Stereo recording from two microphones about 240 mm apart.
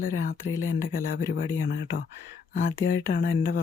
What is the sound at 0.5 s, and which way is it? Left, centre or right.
Speech, left.